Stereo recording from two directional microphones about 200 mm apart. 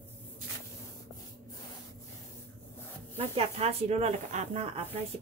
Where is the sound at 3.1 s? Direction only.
30° right (ahead or behind).